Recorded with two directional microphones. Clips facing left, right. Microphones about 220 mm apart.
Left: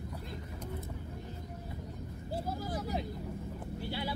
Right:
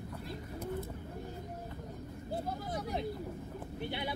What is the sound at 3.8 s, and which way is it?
Vehicle, 20° right (ahead or behind).